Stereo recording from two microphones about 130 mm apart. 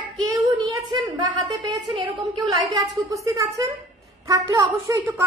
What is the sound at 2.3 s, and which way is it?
A woman's voice, 25° right (ahead or behind).